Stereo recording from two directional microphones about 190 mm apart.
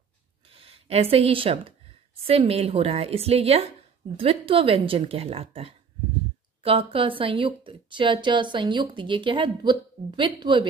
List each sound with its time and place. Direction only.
0.5 s a woman's voice: 30° right (ahead or behind)